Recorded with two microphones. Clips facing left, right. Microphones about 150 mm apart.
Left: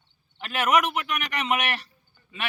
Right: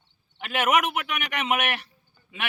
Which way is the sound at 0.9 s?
5° right (ahead or behind).